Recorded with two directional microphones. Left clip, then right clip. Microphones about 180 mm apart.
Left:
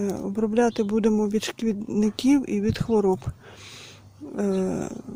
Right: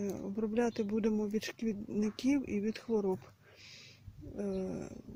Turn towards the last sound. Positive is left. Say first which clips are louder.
# left 13 dB
turn(degrees=20)  # may be behind; listen again after turning